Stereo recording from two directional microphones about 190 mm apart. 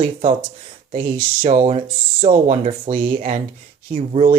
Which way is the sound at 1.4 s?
30° right (ahead or behind).